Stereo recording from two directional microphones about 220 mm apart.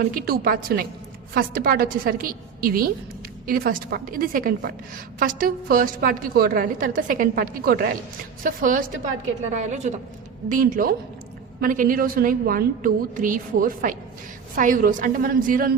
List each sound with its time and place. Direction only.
0.0 s a woman's voice: 40° right (ahead or behind)